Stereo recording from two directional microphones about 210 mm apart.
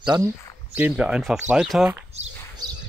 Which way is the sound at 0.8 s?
5° right (ahead or behind).